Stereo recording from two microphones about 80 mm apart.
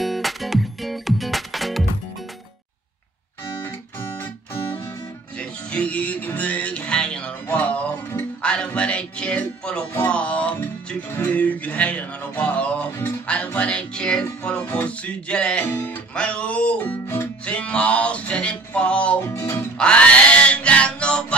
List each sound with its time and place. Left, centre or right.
0.0 s music: centre
5.4 s music: centre
19.2 s music: left
19.8 s music: centre